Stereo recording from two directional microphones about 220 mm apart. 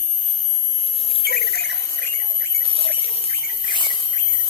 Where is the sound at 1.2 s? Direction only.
45° left (ahead or behind).